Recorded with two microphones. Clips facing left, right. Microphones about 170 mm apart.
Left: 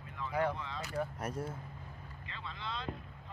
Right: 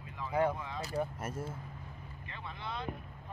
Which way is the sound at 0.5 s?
15° right (ahead or behind).